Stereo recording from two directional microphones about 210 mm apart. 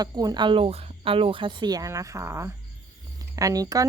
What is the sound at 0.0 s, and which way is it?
Speech, 20° right (ahead or behind).